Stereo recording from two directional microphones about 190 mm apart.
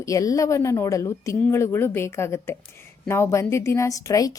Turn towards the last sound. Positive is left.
turn(degrees=15)  # may be behind; listen again after turning